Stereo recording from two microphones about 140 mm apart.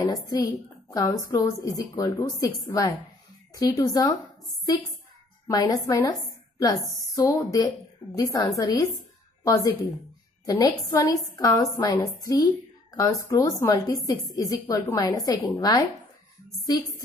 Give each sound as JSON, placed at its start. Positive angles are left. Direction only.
{"t": 0.0, "sound": "a woman's voice", "side_deg": 25}
{"t": 5.5, "sound": "a woman's voice", "side_deg": 25}